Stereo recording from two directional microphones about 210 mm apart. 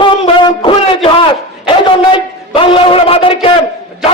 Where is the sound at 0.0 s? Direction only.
20° left (ahead or behind).